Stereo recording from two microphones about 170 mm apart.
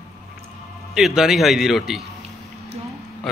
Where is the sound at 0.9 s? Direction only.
5° right (ahead or behind).